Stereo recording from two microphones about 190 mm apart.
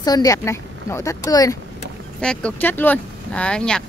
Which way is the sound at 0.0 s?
20° left (ahead or behind).